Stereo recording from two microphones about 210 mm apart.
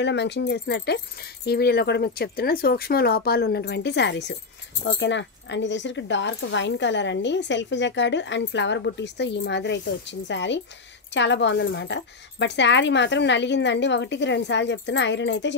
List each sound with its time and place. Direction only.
0.0 s speech: 55° left (ahead or behind)